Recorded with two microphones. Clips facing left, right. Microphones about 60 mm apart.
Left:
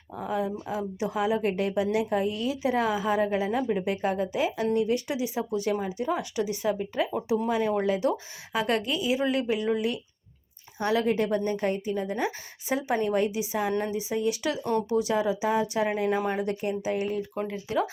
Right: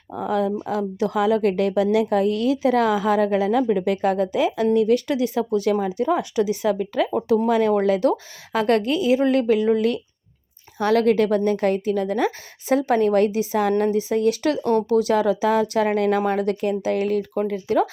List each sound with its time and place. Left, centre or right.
0.2 s a woman's voice: right
8.1 s a woman's voice: right
10.8 s a woman's voice: right
11.6 s a woman's voice: right
17.5 s a woman's voice: right